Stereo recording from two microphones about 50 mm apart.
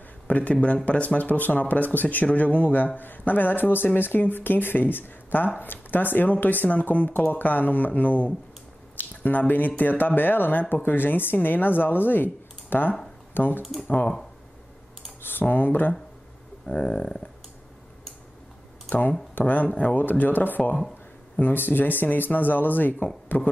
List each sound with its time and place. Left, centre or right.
0.3 s speech: left
13.6 s speech: centre
15.2 s speech: left
16.6 s speech: centre
18.9 s speech: left
23.2 s a sound: left